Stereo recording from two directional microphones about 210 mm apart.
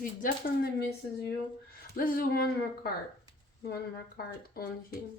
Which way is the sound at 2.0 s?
40° left (ahead or behind).